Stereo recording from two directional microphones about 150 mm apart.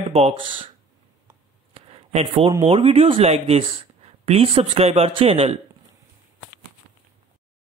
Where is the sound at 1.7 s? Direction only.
40° right (ahead or behind).